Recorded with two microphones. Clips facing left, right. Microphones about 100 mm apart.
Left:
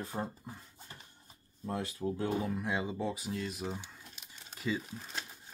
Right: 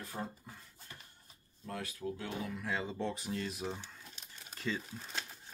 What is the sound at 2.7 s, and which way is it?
Speech, 15° left (ahead or behind).